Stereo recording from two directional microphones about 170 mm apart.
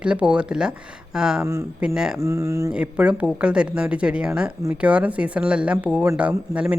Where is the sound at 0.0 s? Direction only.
5° right (ahead or behind).